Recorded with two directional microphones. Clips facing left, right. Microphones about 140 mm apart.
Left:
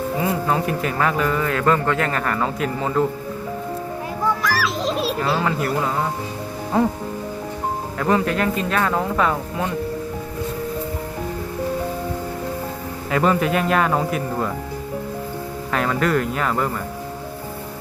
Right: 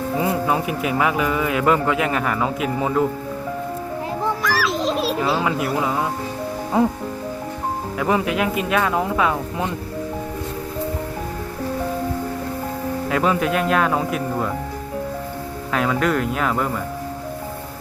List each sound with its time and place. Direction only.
0.4 s speech: 10° right (ahead or behind)
4.4 s music: centre (ahead or behind)
6.7 s speech: 15° right (ahead or behind)
7.9 s speech: 10° right (ahead or behind)
13.1 s speech: centre (ahead or behind)
15.7 s speech: centre (ahead or behind)